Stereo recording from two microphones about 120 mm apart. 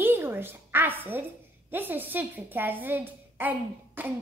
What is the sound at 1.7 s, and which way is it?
A woman's voice, 15° right (ahead or behind).